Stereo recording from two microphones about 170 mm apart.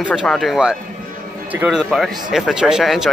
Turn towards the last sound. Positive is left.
turn(degrees=0)  # may be behind; listen again after turning